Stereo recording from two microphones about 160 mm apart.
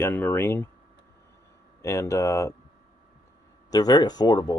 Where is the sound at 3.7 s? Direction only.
25° left (ahead or behind).